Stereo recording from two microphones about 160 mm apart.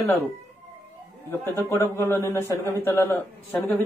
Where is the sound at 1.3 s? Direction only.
20° left (ahead or behind).